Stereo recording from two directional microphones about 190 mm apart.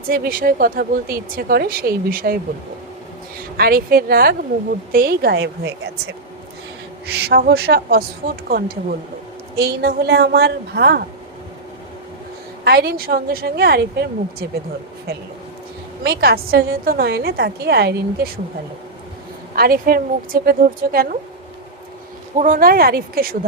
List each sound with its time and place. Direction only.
0.1 s speech: 50° right (ahead or behind)
3.6 s speech: 55° right (ahead or behind)
7.3 s a woman's voice: 55° right (ahead or behind)
12.6 s a woman's voice: 55° right (ahead or behind)
16.0 s a woman's voice: 55° right (ahead or behind)
19.5 s speech: 50° right (ahead or behind)
22.4 s speech: 45° right (ahead or behind)